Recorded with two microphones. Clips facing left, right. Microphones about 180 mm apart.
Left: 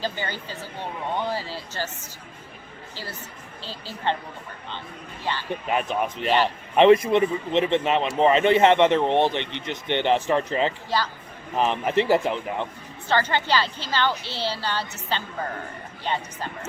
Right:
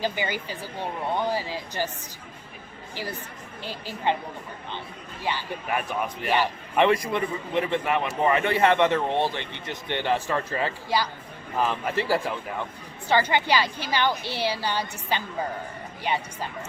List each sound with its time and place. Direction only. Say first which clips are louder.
0.0 s a woman's voice: right 2 dB; 15° right (ahead or behind)
2.9 s a woman's voice: right 4 dB; 15° right (ahead or behind)
5.2 s a woman's voice: even; 10° right (ahead or behind)
5.6 s a man's voice: left 3 dB; 20° left (ahead or behind)
10.8 s a woman's voice: even; 10° right (ahead or behind)
11.5 s a man's voice: left 4 dB; 20° left (ahead or behind)
13.1 s a woman's voice: right 1 dB; 10° right (ahead or behind)